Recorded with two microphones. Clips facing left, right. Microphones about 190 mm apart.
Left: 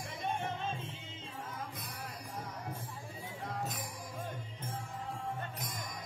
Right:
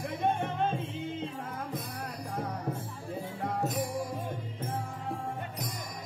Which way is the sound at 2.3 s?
60° right (ahead or behind).